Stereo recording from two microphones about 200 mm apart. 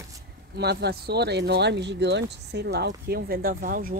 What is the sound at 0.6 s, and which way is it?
Speech, 55° right (ahead or behind).